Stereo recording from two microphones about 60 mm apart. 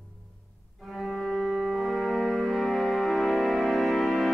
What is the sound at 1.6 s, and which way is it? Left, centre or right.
Music, centre.